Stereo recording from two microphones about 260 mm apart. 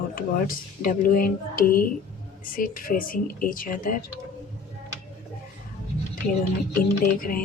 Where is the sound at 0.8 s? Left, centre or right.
Left.